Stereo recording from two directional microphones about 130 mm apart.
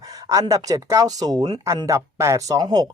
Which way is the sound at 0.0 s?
25° right (ahead or behind).